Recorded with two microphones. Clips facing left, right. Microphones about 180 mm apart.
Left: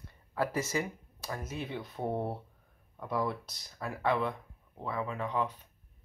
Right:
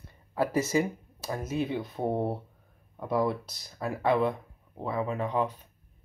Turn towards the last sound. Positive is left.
turn(degrees=-25)  # may be behind; listen again after turning